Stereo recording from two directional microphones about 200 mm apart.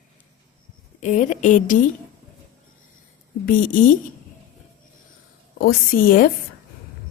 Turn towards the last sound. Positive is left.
turn(degrees=45)  # may be behind; listen again after turning